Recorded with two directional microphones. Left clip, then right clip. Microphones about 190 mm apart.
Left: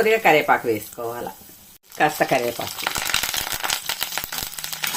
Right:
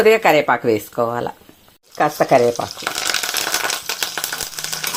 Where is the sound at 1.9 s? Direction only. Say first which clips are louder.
Right 5 dB; 10° right (ahead or behind).